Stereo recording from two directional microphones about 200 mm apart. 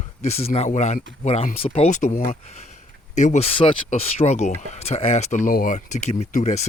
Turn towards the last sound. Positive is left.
turn(degrees=40)  # may be behind; listen again after turning